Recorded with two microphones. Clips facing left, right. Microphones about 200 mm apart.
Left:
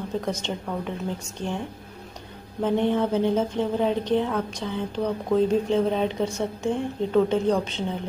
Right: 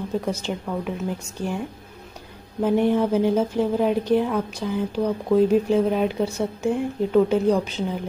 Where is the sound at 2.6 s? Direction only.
10° right (ahead or behind).